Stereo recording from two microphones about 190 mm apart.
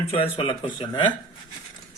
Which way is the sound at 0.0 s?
30° left (ahead or behind).